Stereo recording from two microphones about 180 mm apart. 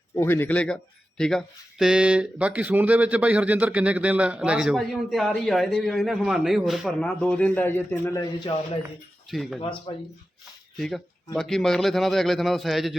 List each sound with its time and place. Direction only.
0.2 s speech: 10° left (ahead or behind)
9.3 s speech: centre (ahead or behind)
9.6 s speech: 30° left (ahead or behind)
10.8 s speech: centre (ahead or behind)